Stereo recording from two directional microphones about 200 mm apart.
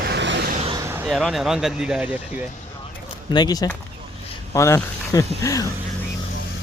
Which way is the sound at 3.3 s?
20° left (ahead or behind).